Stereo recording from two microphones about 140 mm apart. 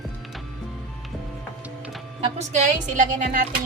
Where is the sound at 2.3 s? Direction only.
60° right (ahead or behind).